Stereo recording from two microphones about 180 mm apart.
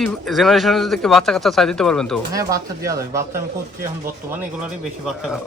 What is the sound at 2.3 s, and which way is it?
Speech, 20° right (ahead or behind).